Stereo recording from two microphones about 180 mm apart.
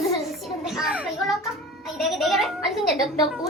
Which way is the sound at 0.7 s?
5° right (ahead or behind).